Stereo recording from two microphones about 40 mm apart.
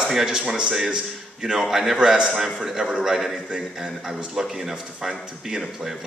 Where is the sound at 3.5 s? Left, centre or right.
Right.